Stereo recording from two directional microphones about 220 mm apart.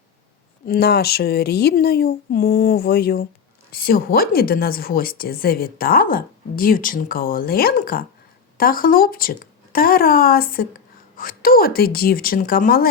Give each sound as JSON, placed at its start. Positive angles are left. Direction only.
{"t": 0.6, "sound": "a woman's voice", "side_deg": 45}